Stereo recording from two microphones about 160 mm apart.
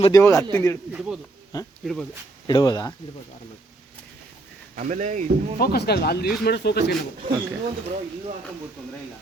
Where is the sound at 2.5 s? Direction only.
25° left (ahead or behind).